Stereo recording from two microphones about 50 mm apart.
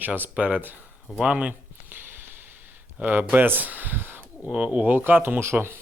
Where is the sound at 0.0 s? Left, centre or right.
Right.